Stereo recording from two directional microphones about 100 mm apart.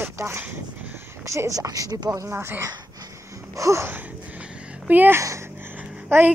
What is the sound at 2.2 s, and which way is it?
Speech, 20° right (ahead or behind).